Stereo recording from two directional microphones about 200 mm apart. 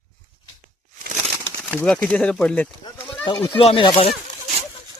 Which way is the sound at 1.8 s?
10° left (ahead or behind).